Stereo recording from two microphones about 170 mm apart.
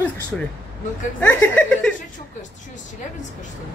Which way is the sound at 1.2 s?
10° left (ahead or behind).